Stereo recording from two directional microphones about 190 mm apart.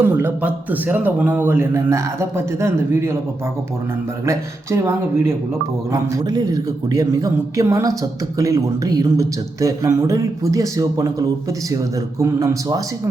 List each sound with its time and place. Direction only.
0.0 s a man's voice: 10° right (ahead or behind)
4.3 s a man's voice: 15° right (ahead or behind)